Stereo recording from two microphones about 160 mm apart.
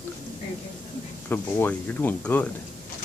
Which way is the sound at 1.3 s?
10° left (ahead or behind).